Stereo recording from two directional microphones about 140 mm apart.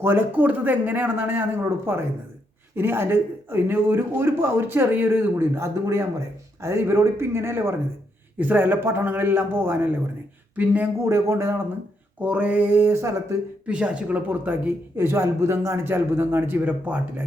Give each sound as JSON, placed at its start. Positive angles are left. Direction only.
{"t": 0.0, "sound": "speech", "side_deg": -15}
{"t": 13.7, "sound": "speech", "side_deg": -10}